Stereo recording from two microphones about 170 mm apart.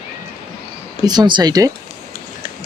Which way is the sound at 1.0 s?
25° right (ahead or behind).